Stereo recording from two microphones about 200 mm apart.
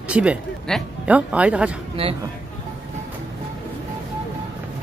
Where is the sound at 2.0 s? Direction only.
30° right (ahead or behind).